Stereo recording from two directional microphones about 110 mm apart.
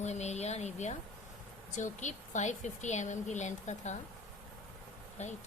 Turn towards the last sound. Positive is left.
turn(degrees=90)